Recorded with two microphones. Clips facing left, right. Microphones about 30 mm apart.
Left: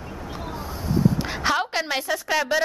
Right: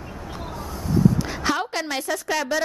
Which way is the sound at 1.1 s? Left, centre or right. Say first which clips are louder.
Left 1 dB; centre.